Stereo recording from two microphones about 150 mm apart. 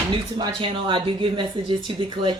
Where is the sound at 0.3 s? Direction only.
30° right (ahead or behind).